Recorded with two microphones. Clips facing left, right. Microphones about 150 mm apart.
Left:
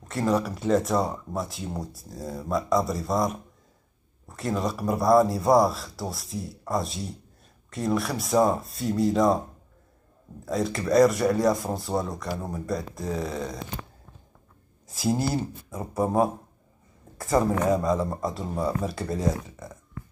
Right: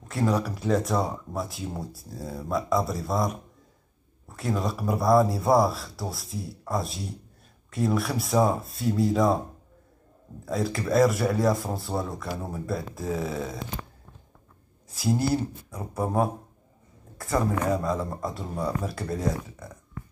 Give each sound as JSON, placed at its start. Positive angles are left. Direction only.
{"t": 0.0, "sound": "speech", "side_deg": 0}
{"t": 10.4, "sound": "speech", "side_deg": 0}
{"t": 15.3, "sound": "speech", "side_deg": 0}
{"t": 17.2, "sound": "speech", "side_deg": 20}
{"t": 17.9, "sound": "speech", "side_deg": 0}